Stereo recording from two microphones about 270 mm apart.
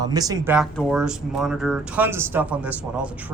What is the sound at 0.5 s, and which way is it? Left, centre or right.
Speech, centre.